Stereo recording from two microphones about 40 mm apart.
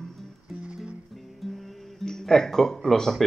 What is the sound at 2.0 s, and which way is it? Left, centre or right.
Speech, centre.